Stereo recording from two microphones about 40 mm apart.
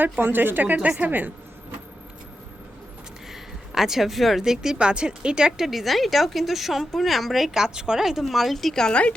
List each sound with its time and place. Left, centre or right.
0.0 s speech: right
3.7 s speech: centre
4.8 s speech: right
5.5 s a woman's voice: centre
7.6 s speech: centre
8.2 s a woman's voice: centre
8.5 s a woman's voice: centre
8.9 s a woman's voice: left